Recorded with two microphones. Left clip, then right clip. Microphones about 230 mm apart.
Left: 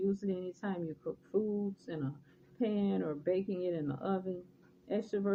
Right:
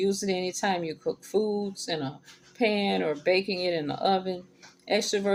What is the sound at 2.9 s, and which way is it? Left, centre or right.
Speech, centre.